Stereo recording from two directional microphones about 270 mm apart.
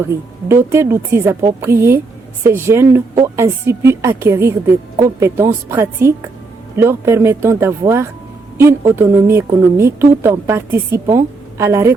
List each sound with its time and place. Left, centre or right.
0.1 s speech: centre